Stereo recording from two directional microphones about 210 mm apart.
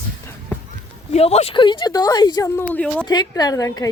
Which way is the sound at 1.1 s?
30° left (ahead or behind).